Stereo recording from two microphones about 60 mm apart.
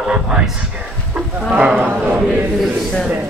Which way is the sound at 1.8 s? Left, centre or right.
Right.